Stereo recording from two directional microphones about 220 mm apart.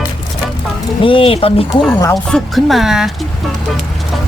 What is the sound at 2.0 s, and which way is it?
Speech, 10° left (ahead or behind).